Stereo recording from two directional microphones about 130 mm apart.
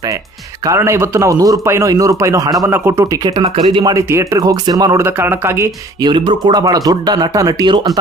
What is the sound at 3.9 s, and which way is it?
Speech, 20° right (ahead or behind).